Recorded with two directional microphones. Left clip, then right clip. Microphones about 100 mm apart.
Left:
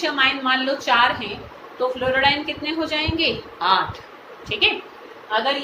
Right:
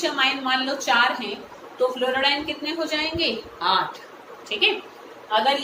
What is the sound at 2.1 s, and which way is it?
A woman's voice, 25° left (ahead or behind).